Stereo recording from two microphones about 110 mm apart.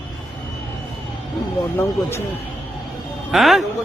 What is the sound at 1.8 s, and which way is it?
Speech, 25° left (ahead or behind).